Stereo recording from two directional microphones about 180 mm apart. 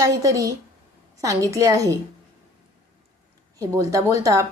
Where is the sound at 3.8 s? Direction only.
15° right (ahead or behind).